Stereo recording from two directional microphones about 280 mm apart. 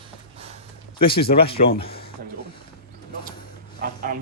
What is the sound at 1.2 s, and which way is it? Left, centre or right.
Speech, left.